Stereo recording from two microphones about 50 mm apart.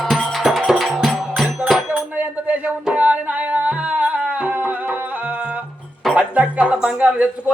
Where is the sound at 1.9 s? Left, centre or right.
Right.